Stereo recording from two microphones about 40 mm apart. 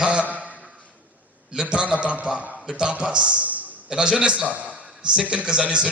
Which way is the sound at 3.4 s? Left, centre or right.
Right.